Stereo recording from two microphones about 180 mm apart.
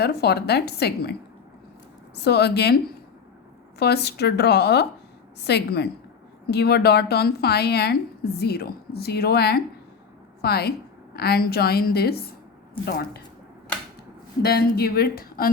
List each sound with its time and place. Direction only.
0.0 s a woman's voice: 65° left (ahead or behind)
2.1 s a woman's voice: 65° left (ahead or behind)
3.8 s a woman's voice: 65° left (ahead or behind)
14.4 s a woman's voice: 60° left (ahead or behind)